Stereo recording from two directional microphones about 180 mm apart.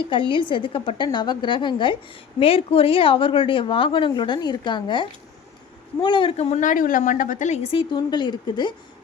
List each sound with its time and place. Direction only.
0.1 s a woman's voice: 30° left (ahead or behind)